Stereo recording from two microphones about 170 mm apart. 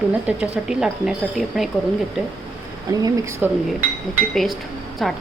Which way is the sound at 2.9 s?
20° right (ahead or behind).